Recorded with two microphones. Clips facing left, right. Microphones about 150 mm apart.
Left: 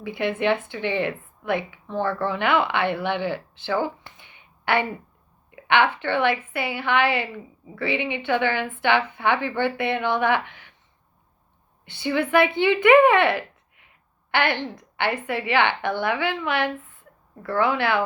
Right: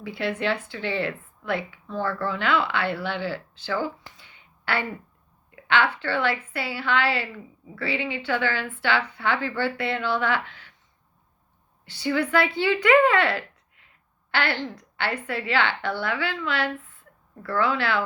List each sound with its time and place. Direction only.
0.0 s a woman's voice: 20° left (ahead or behind)
4.2 s a sound: 20° left (ahead or behind)
5.5 s a woman's voice: 20° left (ahead or behind)
11.9 s speech: 20° left (ahead or behind)